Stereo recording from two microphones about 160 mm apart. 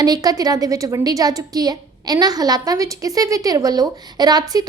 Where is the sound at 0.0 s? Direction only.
25° right (ahead or behind).